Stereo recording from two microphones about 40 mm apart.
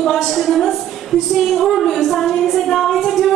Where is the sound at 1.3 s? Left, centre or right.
Centre.